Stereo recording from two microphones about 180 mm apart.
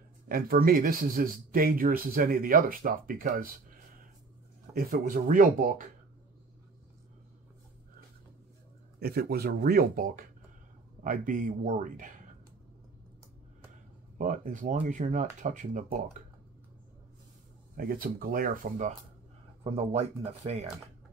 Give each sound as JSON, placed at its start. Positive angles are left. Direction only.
{"t": 0.3, "sound": "speech", "side_deg": -55}
{"t": 4.7, "sound": "speech", "side_deg": -55}
{"t": 9.0, "sound": "speech", "side_deg": -60}
{"t": 14.1, "sound": "speech", "side_deg": -45}
{"t": 17.7, "sound": "speech", "side_deg": -55}
{"t": 19.6, "sound": "speech", "side_deg": -35}